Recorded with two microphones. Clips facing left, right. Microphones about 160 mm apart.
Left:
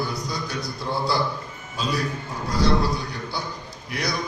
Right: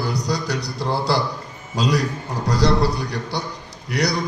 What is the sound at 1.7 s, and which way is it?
Speech, 85° right.